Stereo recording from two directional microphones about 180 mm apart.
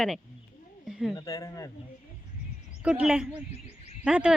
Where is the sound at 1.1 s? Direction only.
20° left (ahead or behind).